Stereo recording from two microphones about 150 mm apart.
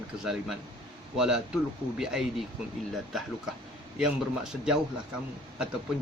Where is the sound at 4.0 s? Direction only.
5° right (ahead or behind).